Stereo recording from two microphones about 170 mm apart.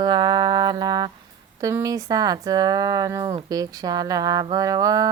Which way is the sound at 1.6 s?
20° right (ahead or behind).